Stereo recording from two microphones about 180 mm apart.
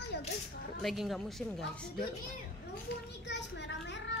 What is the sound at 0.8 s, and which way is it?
A woman's voice, centre (ahead or behind).